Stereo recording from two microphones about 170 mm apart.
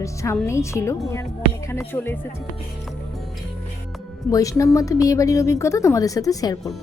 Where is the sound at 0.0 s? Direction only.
15° left (ahead or behind).